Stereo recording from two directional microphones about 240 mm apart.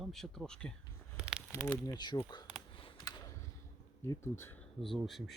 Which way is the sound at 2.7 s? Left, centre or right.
Left.